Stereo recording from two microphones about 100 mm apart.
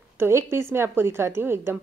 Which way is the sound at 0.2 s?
25° right (ahead or behind).